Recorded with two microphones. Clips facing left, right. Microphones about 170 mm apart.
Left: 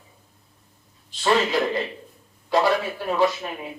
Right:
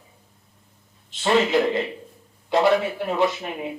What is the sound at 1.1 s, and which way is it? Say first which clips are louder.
Speech: right 2 dB; 20° right (ahead or behind).